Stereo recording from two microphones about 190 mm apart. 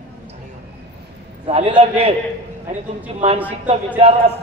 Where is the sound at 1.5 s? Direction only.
35° right (ahead or behind).